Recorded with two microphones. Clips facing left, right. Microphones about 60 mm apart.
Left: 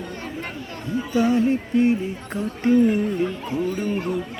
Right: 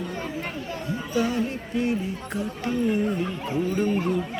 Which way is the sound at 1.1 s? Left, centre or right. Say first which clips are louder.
Left 6 dB; left.